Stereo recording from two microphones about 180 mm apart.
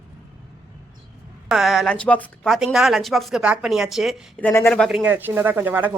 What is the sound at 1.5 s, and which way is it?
A woman's voice, centre (ahead or behind).